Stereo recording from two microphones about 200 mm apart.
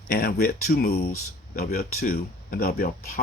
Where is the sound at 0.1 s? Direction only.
50° left (ahead or behind).